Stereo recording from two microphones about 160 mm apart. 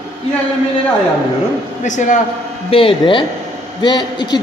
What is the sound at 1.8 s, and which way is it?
Speech, 50° left (ahead or behind).